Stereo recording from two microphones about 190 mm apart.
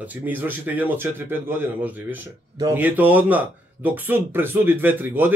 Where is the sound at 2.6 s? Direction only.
10° right (ahead or behind).